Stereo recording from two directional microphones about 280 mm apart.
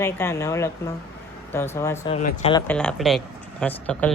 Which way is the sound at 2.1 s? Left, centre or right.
Left.